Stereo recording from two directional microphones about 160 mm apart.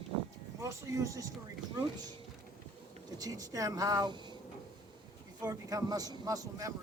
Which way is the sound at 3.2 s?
20° right (ahead or behind).